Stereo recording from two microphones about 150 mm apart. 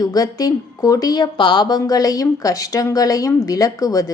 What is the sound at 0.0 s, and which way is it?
A woman's voice, 25° left (ahead or behind).